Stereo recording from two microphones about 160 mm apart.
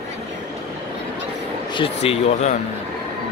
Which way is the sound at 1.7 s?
35° left (ahead or behind).